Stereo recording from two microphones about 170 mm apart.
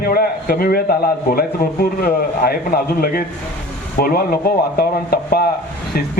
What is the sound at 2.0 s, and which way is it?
A man's voice, 65° left (ahead or behind).